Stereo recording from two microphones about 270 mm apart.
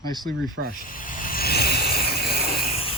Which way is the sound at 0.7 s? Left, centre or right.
Left.